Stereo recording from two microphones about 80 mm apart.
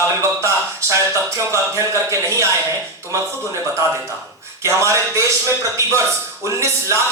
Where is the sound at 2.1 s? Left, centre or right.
Right.